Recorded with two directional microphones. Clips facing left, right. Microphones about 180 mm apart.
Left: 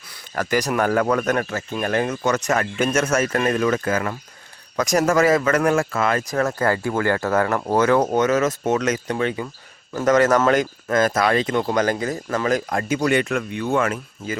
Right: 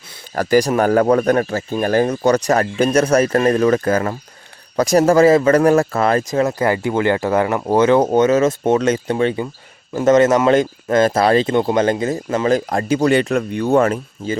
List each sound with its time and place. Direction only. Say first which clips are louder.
0.1 s a man's voice: right 7 dB; 35° right (ahead or behind)
6.5 s speech: right 3 dB; 15° right (ahead or behind); by 14.3 s 35° right (ahead or behind)